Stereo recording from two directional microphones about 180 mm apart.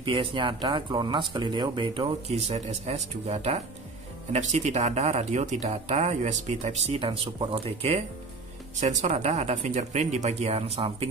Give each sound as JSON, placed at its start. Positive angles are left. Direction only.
{"t": 0.0, "sound": "speech", "side_deg": -30}